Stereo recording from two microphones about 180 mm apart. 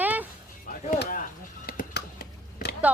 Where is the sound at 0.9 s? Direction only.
60° left (ahead or behind).